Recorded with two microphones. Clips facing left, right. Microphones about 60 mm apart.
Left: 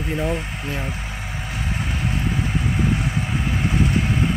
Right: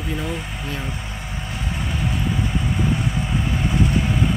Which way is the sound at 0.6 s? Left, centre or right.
Centre.